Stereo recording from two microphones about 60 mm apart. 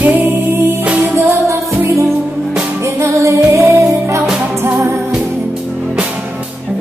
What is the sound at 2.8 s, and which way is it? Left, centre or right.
Music, right.